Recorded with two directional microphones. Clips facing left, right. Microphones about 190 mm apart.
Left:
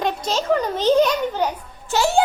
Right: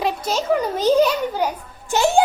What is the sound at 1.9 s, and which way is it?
Speech, 20° right (ahead or behind).